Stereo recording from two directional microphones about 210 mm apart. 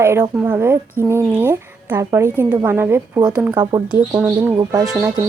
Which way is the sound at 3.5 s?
20° right (ahead or behind).